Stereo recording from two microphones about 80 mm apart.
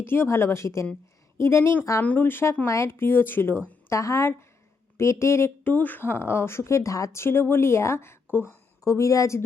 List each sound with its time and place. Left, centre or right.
0.0 s speech: left
2.0 s speech: left
3.8 s speech: left
5.6 s speech: left
8.8 s a woman's voice: left